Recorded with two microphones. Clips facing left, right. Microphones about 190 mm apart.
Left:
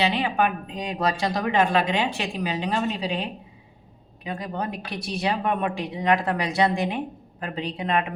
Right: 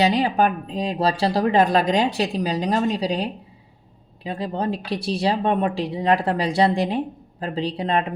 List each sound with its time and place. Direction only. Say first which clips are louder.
0.0 s speech: right 4 dB; 40° right (ahead or behind)